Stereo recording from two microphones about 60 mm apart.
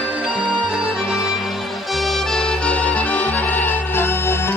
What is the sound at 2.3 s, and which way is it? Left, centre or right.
Music, centre.